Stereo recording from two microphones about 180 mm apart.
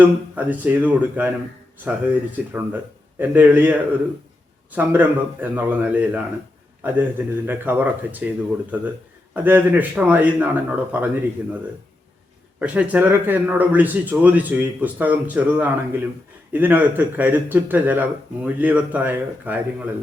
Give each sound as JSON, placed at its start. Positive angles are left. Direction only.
{"t": 0.0, "sound": "speech", "side_deg": -10}